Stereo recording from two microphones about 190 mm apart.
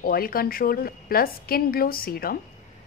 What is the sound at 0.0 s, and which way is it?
A woman's voice, 50° left (ahead or behind).